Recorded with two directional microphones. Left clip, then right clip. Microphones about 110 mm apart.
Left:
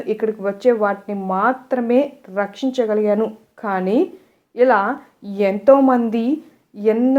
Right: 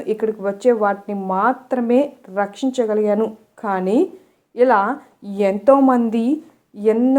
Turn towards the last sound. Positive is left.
turn(degrees=-25)  # may be behind; listen again after turning